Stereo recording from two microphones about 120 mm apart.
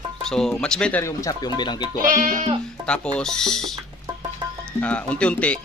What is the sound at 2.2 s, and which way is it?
Sheep, 90° right.